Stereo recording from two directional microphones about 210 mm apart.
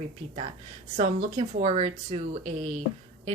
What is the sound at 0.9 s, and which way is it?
A woman's voice, 35° right (ahead or behind).